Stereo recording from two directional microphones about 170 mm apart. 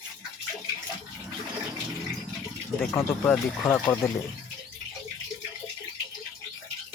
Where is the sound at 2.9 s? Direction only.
15° left (ahead or behind).